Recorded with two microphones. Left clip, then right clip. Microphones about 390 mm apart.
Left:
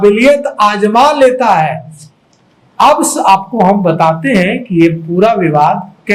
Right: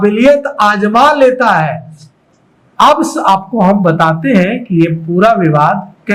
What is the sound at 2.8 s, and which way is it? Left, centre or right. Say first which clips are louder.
A man's voice: even; right.